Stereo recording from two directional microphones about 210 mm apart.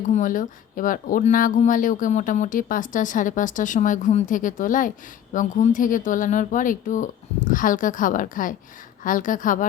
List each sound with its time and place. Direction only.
0.1 s speech: 40° left (ahead or behind)